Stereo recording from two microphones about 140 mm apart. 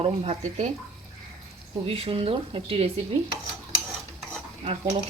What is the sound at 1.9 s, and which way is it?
Speech, 40° right (ahead or behind).